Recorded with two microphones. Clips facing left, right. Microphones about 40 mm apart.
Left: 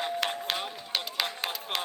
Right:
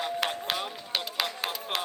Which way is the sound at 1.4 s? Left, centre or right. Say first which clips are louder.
Right 1 dB; centre.